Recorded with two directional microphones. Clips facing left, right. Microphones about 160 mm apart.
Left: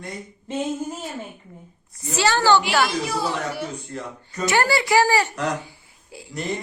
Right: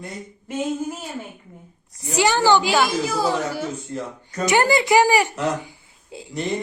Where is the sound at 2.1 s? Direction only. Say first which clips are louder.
Right 1 dB; 15° right (ahead or behind).